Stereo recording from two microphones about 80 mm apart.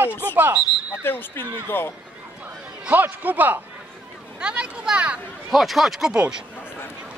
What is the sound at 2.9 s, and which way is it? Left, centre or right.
Speech, right.